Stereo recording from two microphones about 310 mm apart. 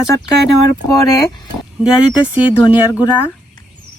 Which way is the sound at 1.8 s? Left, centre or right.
Centre.